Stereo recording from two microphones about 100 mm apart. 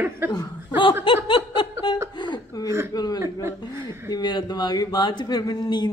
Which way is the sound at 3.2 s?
25° right (ahead or behind).